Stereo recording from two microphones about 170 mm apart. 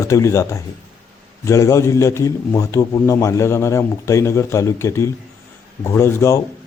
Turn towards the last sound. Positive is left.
turn(degrees=15)  # may be behind; listen again after turning